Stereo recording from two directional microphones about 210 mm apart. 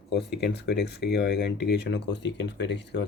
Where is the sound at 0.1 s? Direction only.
50° left (ahead or behind).